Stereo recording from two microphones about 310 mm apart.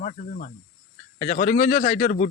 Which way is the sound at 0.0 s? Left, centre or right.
Left.